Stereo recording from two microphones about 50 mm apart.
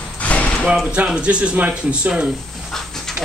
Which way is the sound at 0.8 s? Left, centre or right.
Right.